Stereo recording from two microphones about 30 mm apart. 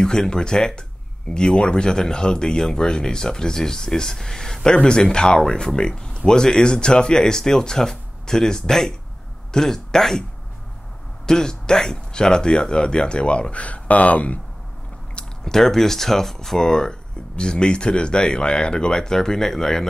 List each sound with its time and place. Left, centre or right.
0.0 s speech: left
4.6 s speech: left
11.2 s speech: left
15.4 s speech: centre
17.4 s speech: left; by 19.9 s centre